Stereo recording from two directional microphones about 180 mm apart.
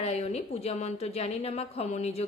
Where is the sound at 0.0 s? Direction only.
35° left (ahead or behind).